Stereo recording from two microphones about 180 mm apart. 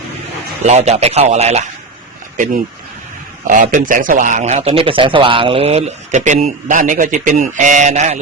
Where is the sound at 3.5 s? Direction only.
45° right (ahead or behind).